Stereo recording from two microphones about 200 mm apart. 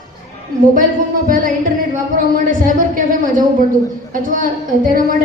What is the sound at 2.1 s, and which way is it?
A woman's voice, 40° right (ahead or behind).